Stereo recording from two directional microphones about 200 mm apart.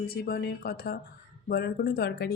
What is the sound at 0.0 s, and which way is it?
A woman's voice, 50° left (ahead or behind).